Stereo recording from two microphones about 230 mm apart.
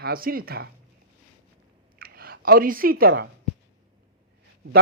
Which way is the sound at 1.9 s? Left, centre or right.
Right.